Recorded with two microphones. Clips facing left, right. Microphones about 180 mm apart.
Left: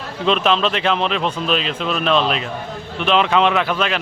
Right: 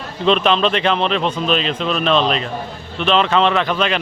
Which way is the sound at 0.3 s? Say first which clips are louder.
Right 2 dB; centre (ahead or behind).